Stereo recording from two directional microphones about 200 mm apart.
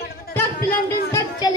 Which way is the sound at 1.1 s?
15° left (ahead or behind).